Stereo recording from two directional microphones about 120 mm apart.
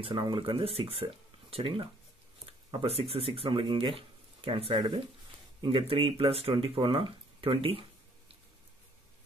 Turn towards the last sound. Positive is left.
turn(degrees=-50)  # may be behind; listen again after turning